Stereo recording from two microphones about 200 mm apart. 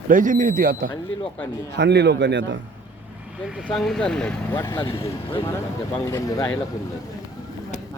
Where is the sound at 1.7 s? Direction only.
55° right (ahead or behind).